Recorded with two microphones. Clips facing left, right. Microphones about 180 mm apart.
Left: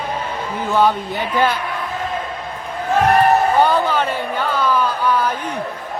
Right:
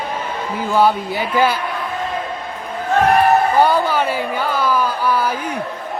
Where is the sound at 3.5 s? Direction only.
10° right (ahead or behind).